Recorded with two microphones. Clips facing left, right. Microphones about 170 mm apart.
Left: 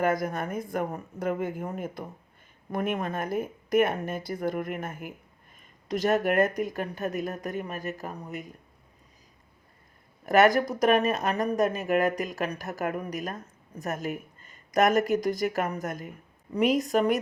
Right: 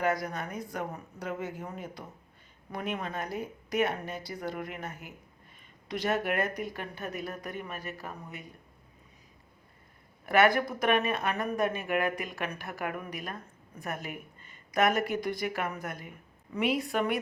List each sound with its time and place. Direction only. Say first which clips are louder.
0.0 s speech: left 4 dB; 50° left (ahead or behind)
10.2 s speech: left 4 dB; 45° left (ahead or behind)